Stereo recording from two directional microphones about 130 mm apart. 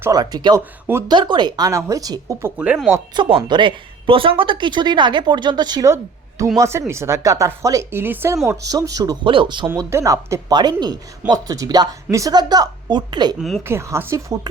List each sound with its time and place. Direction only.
0.1 s speech: 30° right (ahead or behind)
2.6 s speech: 10° right (ahead or behind)
3.2 s speech: 40° right (ahead or behind)
6.6 s speech: 20° right (ahead or behind)
8.4 s speech: 30° right (ahead or behind)
9.2 s speech: 40° right (ahead or behind)
9.6 s speech: 20° right (ahead or behind)
10.5 s speech: 35° right (ahead or behind)
13.7 s speech: 20° right (ahead or behind)